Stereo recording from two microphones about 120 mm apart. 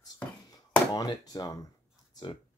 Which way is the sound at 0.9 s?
35° left (ahead or behind).